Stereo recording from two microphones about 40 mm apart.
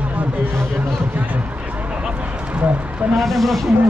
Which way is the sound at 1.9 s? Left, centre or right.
Right.